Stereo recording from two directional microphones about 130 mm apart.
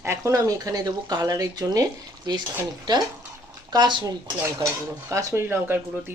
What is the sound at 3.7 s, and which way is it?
Speech, 35° right (ahead or behind).